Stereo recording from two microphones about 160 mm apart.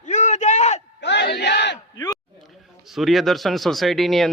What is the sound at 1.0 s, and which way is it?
Battle cry, 90° left.